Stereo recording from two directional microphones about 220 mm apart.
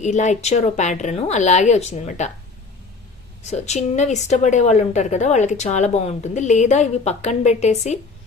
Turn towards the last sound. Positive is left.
turn(degrees=30)  # may be behind; listen again after turning